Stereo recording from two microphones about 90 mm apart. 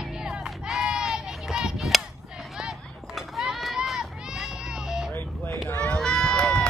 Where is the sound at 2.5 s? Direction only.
5° right (ahead or behind).